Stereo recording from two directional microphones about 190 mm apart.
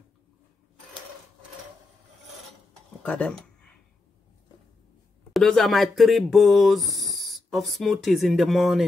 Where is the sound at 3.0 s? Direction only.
5° left (ahead or behind).